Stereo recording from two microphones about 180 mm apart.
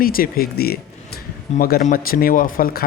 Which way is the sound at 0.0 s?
55° left (ahead or behind).